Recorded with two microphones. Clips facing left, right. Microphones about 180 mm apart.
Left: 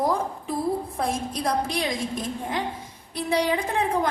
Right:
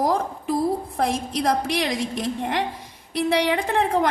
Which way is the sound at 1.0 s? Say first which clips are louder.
Right 6 dB; 75° right (ahead or behind).